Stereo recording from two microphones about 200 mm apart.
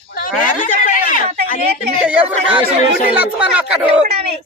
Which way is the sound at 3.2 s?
5° right (ahead or behind).